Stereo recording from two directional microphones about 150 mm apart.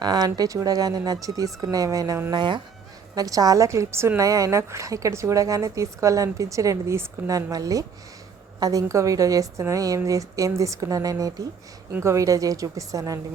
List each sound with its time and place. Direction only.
0.0 s a woman's voice: 25° right (ahead or behind)
2.3 s a woman's voice: 30° right (ahead or behind)